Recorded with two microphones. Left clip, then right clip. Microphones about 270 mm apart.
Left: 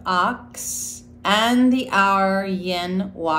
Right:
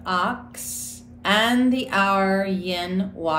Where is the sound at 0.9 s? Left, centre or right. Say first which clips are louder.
Left 1 dB; centre.